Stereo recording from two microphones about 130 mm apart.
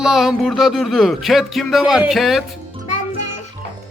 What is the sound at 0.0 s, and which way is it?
Speech, 5° right (ahead or behind).